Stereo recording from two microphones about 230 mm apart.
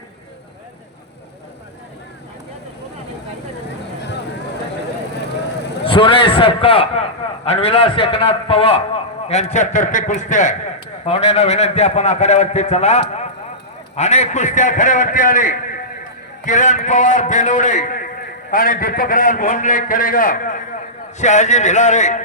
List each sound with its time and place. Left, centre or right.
5.8 s a man's voice: left